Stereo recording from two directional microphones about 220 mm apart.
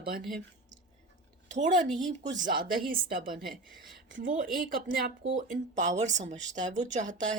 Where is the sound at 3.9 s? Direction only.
40° right (ahead or behind).